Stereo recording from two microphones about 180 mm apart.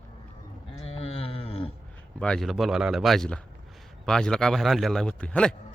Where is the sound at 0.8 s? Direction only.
35° left (ahead or behind).